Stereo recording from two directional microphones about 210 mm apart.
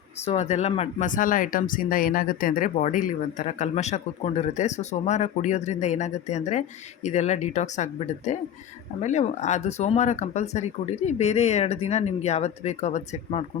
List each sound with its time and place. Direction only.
0.3 s speech: 30° left (ahead or behind)